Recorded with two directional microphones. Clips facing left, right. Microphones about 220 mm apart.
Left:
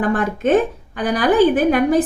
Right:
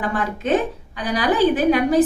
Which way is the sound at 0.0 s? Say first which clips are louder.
Left 6 dB; 50° left (ahead or behind).